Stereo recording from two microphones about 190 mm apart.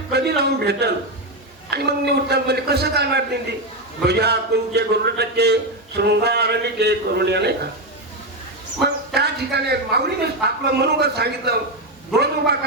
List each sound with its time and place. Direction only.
0.1 s a man's voice: 60° right (ahead or behind)
8.8 s a man's voice: 60° right (ahead or behind)